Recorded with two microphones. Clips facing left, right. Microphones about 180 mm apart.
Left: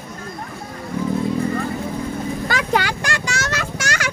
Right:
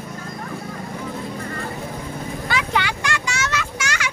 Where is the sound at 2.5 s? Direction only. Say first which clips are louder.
Left 2 dB; 40° left (ahead or behind).